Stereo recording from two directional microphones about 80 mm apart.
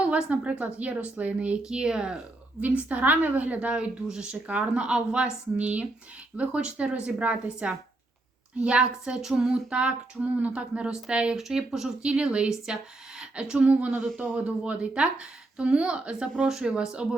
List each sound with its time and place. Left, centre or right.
0.0 s a woman's voice: centre